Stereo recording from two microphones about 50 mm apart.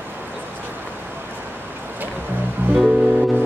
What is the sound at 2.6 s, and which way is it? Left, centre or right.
Music, right.